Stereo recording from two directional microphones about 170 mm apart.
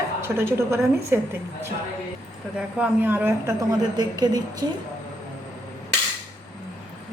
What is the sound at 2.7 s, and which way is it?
A woman's voice, 10° right (ahead or behind).